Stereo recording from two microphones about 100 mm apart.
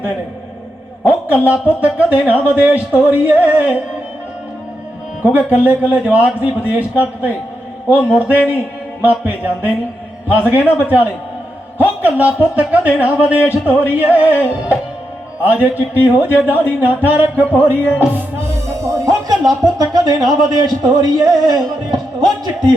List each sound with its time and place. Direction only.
1.0 s speech: 15° right (ahead or behind)
5.2 s speech: 15° right (ahead or behind)
18.8 s music: 30° right (ahead or behind)
19.8 s speech: 40° right (ahead or behind)